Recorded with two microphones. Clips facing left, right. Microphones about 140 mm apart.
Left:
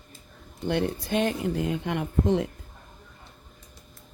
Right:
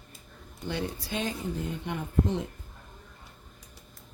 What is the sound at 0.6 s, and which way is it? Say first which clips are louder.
Speech: left 7 dB; 55° left (ahead or behind).